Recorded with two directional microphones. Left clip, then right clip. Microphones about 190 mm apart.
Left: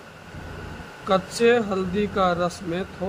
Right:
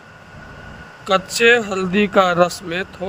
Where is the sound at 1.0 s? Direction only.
40° right (ahead or behind).